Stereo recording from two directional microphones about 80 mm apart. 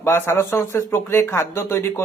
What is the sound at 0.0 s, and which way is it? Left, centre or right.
Speech, left.